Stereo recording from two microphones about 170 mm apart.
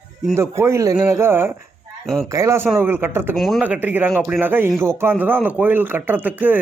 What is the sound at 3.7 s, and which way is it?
Speech, 10° right (ahead or behind).